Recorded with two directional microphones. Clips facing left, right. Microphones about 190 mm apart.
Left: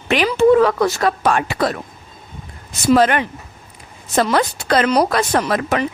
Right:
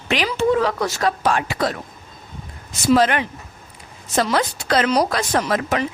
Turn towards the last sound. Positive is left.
turn(degrees=60)  # may be behind; listen again after turning